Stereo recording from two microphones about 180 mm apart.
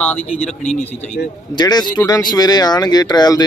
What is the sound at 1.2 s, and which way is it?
Speech, 65° left (ahead or behind).